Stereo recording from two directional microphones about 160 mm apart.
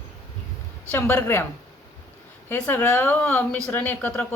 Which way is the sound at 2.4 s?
10° left (ahead or behind).